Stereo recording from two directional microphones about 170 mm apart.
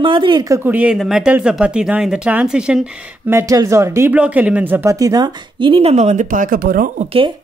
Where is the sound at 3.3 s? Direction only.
20° right (ahead or behind); by 7.0 s 55° right (ahead or behind).